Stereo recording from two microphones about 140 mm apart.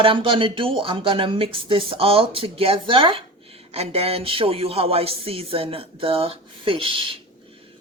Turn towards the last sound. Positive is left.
turn(degrees=-40)  # may be behind; listen again after turning